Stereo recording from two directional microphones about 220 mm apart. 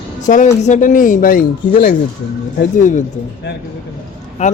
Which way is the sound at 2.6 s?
35° left (ahead or behind).